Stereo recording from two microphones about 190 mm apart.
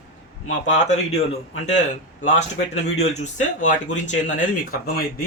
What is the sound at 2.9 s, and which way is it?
Speech, 35° left (ahead or behind).